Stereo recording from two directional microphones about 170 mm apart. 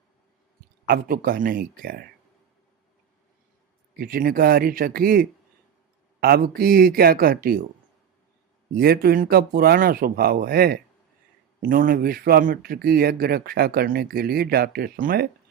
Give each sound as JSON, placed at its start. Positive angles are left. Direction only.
{"t": 0.9, "sound": "speech", "side_deg": -60}
{"t": 3.9, "sound": "speech", "side_deg": -60}
{"t": 8.7, "sound": "speech", "side_deg": -65}